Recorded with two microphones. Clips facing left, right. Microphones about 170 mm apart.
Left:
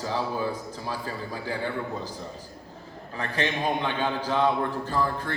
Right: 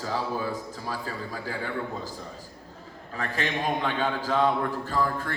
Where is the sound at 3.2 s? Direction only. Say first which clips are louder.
Left 1 dB; 20° left (ahead or behind).